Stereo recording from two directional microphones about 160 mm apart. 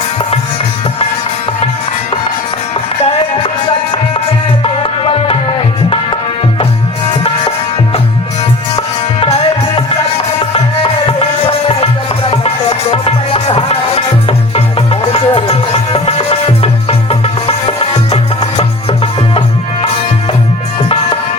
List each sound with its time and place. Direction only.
3.0 s music: 40° left (ahead or behind)
4.6 s tabla: 35° left (ahead or behind)
10.5 s music: 35° left (ahead or behind)